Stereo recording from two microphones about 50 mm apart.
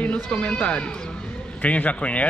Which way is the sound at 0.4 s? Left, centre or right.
Left.